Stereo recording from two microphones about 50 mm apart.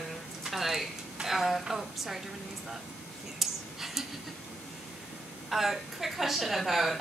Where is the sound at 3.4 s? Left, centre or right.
Centre.